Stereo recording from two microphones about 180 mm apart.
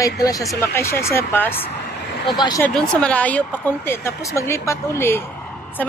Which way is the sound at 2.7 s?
5° left (ahead or behind).